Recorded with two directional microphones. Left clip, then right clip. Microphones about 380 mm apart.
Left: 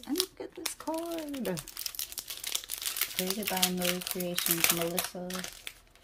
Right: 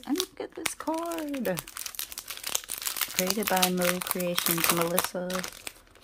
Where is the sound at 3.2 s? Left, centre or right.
Centre.